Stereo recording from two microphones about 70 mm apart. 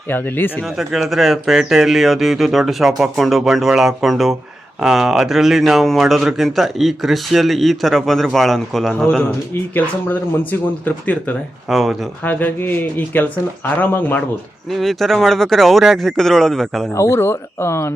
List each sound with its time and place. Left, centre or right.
0.1 s speech: left
0.6 s speech: centre
9.7 s speech: left
11.7 s speech: centre
12.2 s speech: left
14.7 s speech: centre
16.9 s speech: left